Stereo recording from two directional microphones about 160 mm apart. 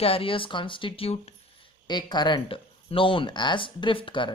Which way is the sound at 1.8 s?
25° left (ahead or behind).